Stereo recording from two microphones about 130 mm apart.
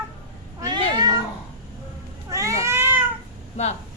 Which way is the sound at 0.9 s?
30° right (ahead or behind).